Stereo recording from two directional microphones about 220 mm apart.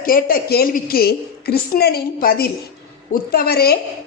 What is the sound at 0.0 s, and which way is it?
Speech, 40° left (ahead or behind).